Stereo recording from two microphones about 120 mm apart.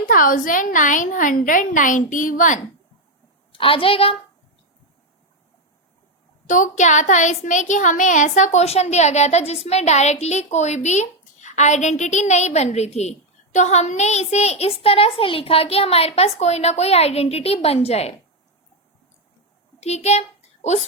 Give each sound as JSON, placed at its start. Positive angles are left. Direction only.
{"t": 0.5, "sound": "a woman's voice", "side_deg": 90}
{"t": 3.5, "sound": "a woman's voice", "side_deg": 50}
{"t": 6.5, "sound": "speech", "side_deg": 90}
{"t": 19.8, "sound": "a child's voice", "side_deg": 65}